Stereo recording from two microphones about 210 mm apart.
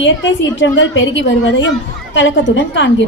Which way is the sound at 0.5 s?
60° left (ahead or behind).